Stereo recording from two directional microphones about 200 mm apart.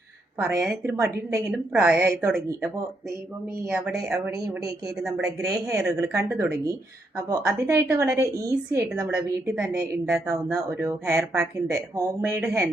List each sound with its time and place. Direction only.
0.3 s a woman's voice: 10° right (ahead or behind)
0.9 s a woman's voice: 15° right (ahead or behind)